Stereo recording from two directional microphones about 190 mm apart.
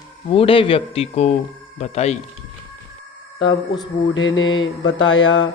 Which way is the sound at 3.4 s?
20° left (ahead or behind).